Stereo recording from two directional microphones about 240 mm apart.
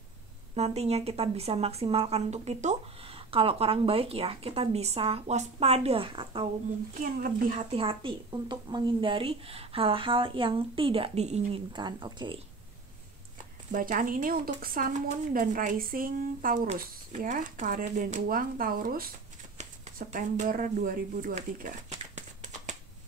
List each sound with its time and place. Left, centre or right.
0.6 s a woman's voice: right
6.9 s a woman's voice: right
7.7 s a woman's voice: right
13.7 s a woman's voice: right